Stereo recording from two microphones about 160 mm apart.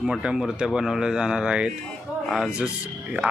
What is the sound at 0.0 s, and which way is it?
Speech, 5° right (ahead or behind).